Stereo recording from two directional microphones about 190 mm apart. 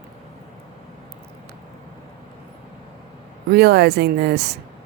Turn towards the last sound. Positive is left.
turn(degrees=-60)  # may be behind; listen again after turning